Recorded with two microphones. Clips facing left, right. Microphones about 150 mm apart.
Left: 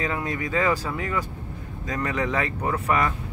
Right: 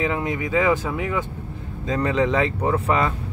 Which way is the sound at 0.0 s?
20° right (ahead or behind).